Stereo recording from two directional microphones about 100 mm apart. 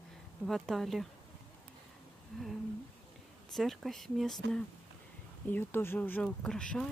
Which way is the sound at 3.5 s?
Centre (ahead or behind).